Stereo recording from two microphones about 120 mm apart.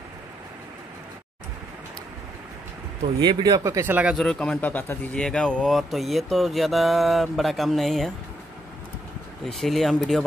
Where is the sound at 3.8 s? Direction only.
10° right (ahead or behind).